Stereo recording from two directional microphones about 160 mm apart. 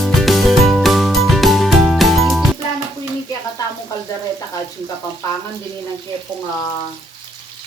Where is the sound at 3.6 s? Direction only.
25° left (ahead or behind).